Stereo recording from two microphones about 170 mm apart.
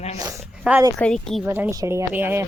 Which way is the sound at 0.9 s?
5° left (ahead or behind).